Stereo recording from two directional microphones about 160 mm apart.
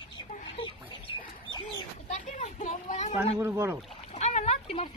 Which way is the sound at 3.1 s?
15° right (ahead or behind).